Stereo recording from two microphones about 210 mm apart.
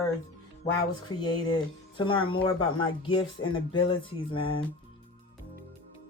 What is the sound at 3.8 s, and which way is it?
Speech, 25° left (ahead or behind).